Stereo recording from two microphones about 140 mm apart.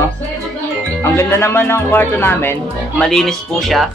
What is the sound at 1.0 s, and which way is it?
Speech, 20° left (ahead or behind).